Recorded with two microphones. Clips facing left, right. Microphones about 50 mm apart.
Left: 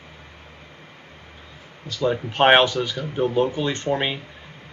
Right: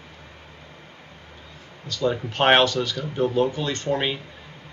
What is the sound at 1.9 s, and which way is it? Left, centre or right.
Speech, centre.